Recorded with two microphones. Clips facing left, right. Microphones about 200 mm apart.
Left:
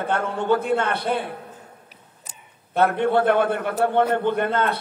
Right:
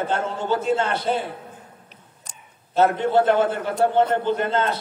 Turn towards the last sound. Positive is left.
turn(degrees=60)  # may be behind; listen again after turning